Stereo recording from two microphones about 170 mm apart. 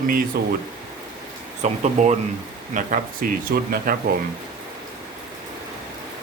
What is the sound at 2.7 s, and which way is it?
Speech, 55° right (ahead or behind).